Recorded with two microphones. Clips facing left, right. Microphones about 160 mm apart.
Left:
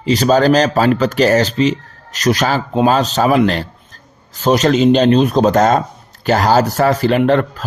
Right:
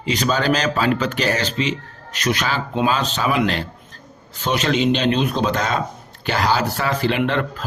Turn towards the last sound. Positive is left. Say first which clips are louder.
# left 8 dB
turn(degrees=40)  # may be behind; listen again after turning